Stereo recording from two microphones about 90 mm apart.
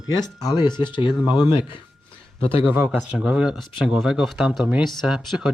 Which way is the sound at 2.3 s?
90° left.